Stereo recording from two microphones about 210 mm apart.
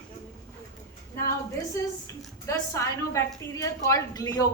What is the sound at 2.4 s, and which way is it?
A woman's voice, 15° left (ahead or behind).